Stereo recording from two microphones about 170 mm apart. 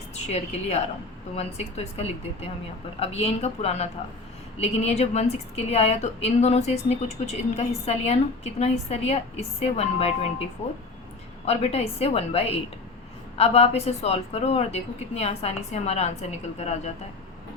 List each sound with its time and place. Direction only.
0.3 s a woman's voice: 40° left (ahead or behind)
11.4 s a woman's voice: 40° left (ahead or behind)